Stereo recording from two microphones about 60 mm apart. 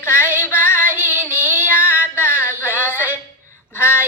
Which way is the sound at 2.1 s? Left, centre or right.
Left.